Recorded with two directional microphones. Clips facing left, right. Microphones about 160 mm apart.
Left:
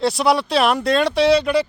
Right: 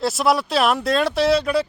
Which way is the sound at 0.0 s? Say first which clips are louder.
Left 2 dB; centre (ahead or behind).